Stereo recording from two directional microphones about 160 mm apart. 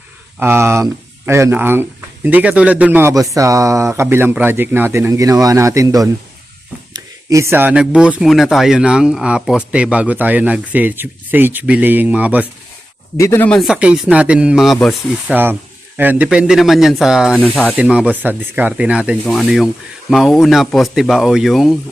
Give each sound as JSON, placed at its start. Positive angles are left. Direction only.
{"t": 0.3, "sound": "speech", "side_deg": -15}
{"t": 13.1, "sound": "speech", "side_deg": 15}
{"t": 13.6, "sound": "speech", "side_deg": -5}
{"t": 15.3, "sound": "speech", "side_deg": -10}